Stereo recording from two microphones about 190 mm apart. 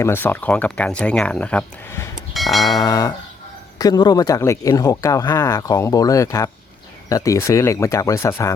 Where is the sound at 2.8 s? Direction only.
20° left (ahead or behind).